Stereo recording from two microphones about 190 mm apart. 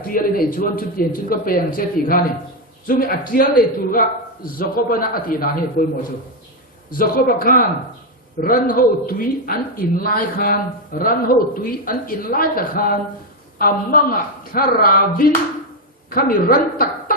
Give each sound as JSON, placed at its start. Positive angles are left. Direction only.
{"t": 0.0, "sound": "speech", "side_deg": 50}
{"t": 7.3, "sound": "a woman's voice", "side_deg": 50}